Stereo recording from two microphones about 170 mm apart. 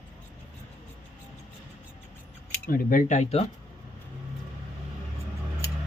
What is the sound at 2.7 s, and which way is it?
Speech, 55° left (ahead or behind).